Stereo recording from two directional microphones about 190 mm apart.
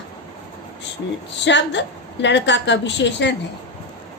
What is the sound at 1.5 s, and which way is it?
A woman's voice, 70° left (ahead or behind).